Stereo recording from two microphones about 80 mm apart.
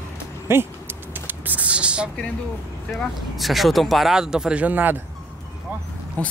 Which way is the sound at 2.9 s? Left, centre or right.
Centre.